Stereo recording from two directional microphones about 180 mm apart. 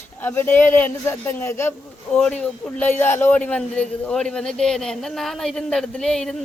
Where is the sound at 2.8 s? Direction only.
10° left (ahead or behind).